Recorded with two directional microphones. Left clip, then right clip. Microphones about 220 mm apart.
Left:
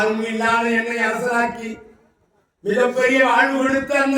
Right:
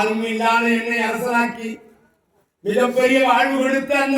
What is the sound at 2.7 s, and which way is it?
A man's voice, 20° right (ahead or behind).